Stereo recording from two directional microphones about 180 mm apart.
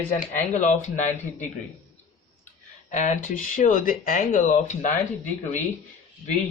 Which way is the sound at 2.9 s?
45° left (ahead or behind).